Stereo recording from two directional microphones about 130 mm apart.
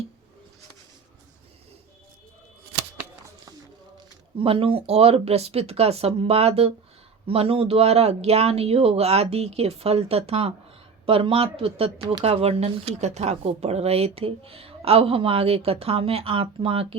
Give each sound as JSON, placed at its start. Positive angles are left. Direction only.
{"t": 4.4, "sound": "speech", "side_deg": -45}